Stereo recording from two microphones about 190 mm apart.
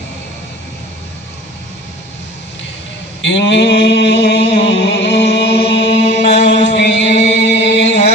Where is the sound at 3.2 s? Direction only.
70° left (ahead or behind).